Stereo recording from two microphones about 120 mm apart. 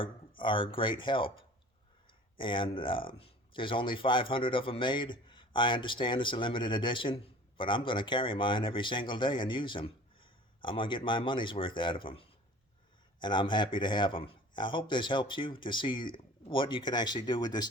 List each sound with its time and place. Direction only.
0.0 s speech: 45° left (ahead or behind)